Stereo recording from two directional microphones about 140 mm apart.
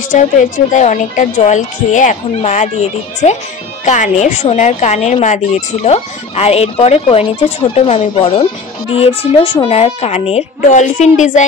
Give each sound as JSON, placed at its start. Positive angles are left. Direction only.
{"t": 0.1, "sound": "speech", "side_deg": 55}
{"t": 3.8, "sound": "speech", "side_deg": 60}